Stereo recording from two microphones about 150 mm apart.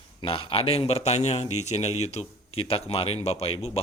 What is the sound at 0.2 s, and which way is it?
A man's voice, 35° left (ahead or behind).